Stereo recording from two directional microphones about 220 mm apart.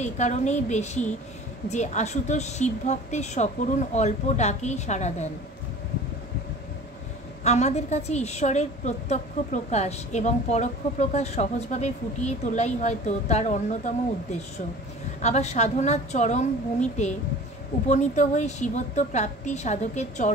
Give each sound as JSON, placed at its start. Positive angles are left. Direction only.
{"t": 0.0, "sound": "a woman's voice", "side_deg": 30}
{"t": 7.4, "sound": "a woman's voice", "side_deg": 30}
{"t": 15.2, "sound": "a woman's voice", "side_deg": 30}
{"t": 17.8, "sound": "a woman's voice", "side_deg": 35}